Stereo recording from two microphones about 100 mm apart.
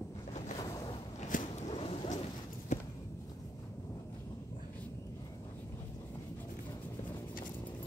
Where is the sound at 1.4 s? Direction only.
80° left.